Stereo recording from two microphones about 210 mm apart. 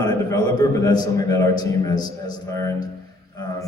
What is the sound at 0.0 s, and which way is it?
A man's voice, 20° left (ahead or behind).